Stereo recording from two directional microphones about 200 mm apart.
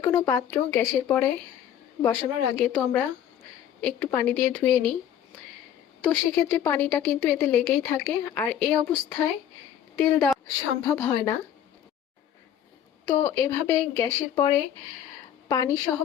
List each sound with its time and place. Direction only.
0.0 s a woman's voice: 15° left (ahead or behind)
6.0 s a woman's voice: 5° left (ahead or behind)
13.1 s a woman's voice: 15° left (ahead or behind)